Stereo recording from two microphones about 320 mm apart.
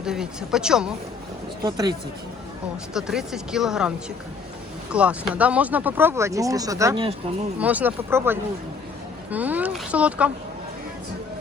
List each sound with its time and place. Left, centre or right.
0.0 s speech: centre
2.9 s speech: centre
7.6 s speech: centre